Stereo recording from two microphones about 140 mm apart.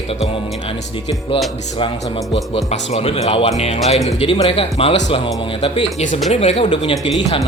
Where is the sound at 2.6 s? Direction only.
45° left (ahead or behind).